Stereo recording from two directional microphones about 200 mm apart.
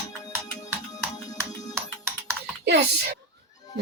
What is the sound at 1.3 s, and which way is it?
Music, 20° left (ahead or behind).